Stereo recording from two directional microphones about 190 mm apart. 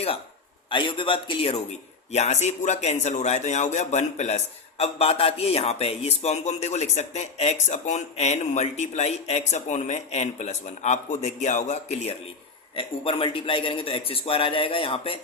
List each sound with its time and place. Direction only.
0.7 s a man's voice: 25° left (ahead or behind)